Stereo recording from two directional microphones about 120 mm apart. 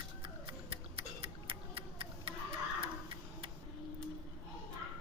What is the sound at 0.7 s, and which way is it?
Tick-tock, 50° right (ahead or behind).